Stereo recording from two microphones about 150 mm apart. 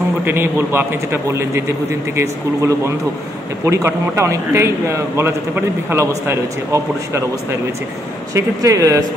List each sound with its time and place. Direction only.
0.2 s a man's voice: 15° right (ahead or behind)
8.4 s a man's voice: 20° right (ahead or behind)